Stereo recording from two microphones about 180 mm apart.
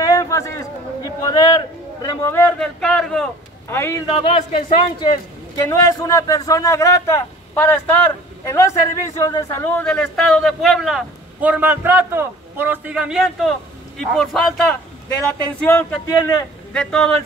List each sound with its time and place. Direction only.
0.0 s a sound: 15° left (ahead or behind)
2.8 s a man's voice: 5° left (ahead or behind)
3.7 s a man's voice: 15° left (ahead or behind)
4.2 s speech: 35° left (ahead or behind)
5.1 s a man's voice: 20° left (ahead or behind)
16.1 s a man's voice: 20° left (ahead or behind)
16.7 s a man's voice: 5° left (ahead or behind)